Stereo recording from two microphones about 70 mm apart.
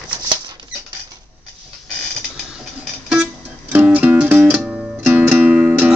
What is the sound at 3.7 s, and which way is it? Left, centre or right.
Music, right.